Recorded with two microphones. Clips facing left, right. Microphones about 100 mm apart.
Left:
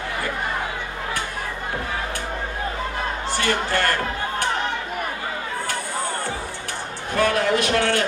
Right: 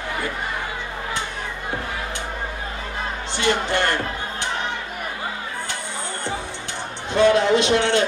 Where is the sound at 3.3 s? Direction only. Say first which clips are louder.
Right 2 dB; 20° right (ahead or behind).